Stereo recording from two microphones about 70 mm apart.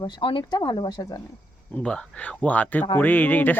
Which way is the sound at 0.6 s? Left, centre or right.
Left.